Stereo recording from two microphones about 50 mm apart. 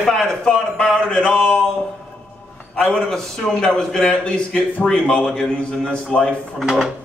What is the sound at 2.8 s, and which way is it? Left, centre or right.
A man's voice, centre.